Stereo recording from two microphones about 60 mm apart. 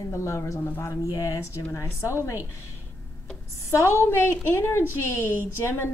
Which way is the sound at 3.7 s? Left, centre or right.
Left.